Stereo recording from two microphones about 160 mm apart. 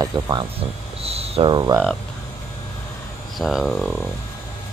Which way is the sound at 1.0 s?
40° right (ahead or behind).